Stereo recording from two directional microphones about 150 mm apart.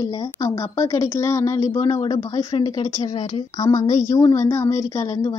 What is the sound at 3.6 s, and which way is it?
Speech, 25° left (ahead or behind).